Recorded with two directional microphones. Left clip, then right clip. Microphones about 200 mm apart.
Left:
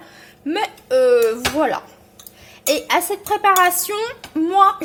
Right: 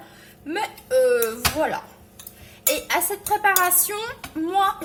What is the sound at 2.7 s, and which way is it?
A woman's voice, 40° left (ahead or behind).